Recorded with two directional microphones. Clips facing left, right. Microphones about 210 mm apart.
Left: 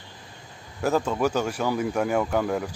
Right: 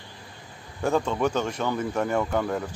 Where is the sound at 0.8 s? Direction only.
5° left (ahead or behind).